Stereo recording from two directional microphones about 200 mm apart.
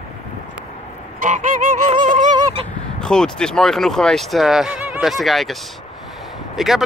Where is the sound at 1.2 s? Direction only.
40° right (ahead or behind).